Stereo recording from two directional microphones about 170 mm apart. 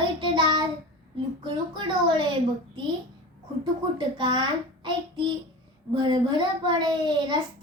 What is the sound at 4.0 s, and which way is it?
Child singing, 25° right (ahead or behind).